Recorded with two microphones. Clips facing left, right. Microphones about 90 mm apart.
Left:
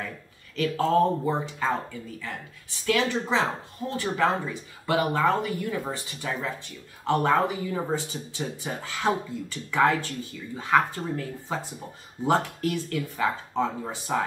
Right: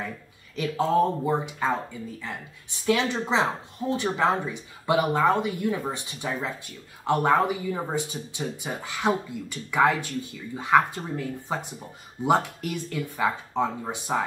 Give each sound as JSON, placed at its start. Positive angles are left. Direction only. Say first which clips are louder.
{"t": 0.6, "sound": "speech", "louder": "even", "side_deg": -15}
{"t": 2.9, "sound": "speech", "louder": "right 1 dB", "side_deg": -20}